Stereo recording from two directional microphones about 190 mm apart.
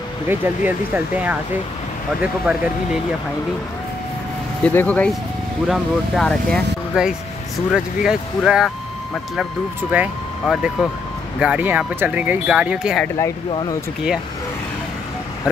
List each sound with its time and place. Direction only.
0.3 s speech: 10° right (ahead or behind)
2.5 s speech: 5° right (ahead or behind)
4.6 s speech: 10° left (ahead or behind)
9.9 s speech: 10° right (ahead or behind)
13.5 s speech: 25° left (ahead or behind)